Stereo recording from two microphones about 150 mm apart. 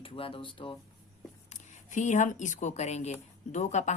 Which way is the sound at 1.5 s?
55° left (ahead or behind).